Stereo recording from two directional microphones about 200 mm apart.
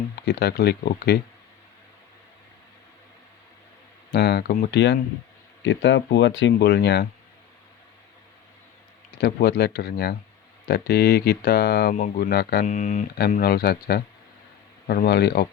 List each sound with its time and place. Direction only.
0.3 s speech: 50° left (ahead or behind)
4.1 s speech: 55° left (ahead or behind)
9.1 s speech: 50° left (ahead or behind)
11.9 s speech: 40° left (ahead or behind)
12.6 s speech: 35° left (ahead or behind)
13.3 s speech: 50° left (ahead or behind)